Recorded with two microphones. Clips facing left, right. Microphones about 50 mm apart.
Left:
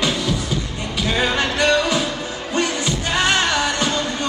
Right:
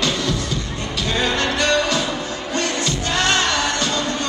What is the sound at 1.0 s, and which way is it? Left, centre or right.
Music, centre.